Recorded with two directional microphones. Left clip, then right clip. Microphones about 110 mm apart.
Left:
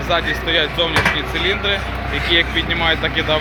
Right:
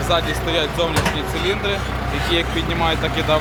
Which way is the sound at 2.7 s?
30° right (ahead or behind).